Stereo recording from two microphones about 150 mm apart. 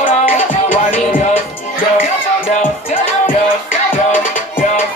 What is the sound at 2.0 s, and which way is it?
Music, 55° left (ahead or behind).